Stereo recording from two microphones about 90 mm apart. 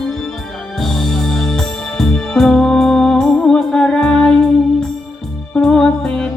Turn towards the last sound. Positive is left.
turn(degrees=5)  # may be behind; listen again after turning